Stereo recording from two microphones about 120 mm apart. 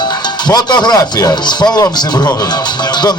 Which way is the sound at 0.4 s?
35° left (ahead or behind).